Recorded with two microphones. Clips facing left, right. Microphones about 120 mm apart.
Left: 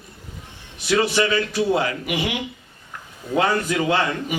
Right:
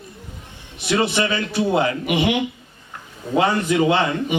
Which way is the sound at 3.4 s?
25° right (ahead or behind).